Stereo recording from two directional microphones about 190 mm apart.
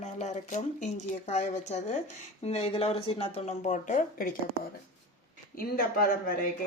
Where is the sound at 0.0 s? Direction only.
35° left (ahead or behind).